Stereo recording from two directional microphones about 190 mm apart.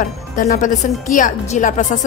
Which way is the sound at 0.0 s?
45° left (ahead or behind).